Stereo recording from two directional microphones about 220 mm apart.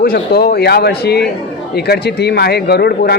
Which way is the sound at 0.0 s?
45° left (ahead or behind).